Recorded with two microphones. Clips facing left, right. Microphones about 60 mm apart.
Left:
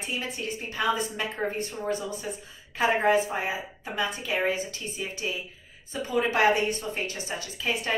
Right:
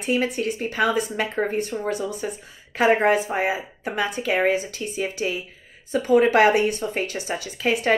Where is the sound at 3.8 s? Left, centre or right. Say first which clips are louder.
Right 6 dB; right.